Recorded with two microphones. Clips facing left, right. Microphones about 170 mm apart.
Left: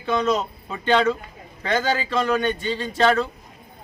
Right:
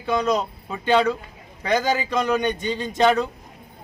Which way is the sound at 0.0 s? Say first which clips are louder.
Even; 10° right (ahead or behind).